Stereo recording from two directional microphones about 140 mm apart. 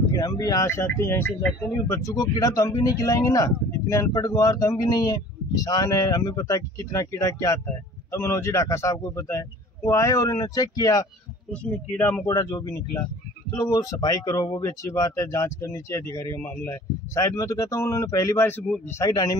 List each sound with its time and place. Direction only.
0.1 s speech: 25° left (ahead or behind)
11.5 s speech: 10° left (ahead or behind)
12.3 s speech: 25° left (ahead or behind)